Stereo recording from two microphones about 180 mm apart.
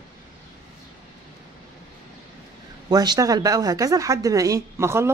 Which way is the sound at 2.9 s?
20° right (ahead or behind).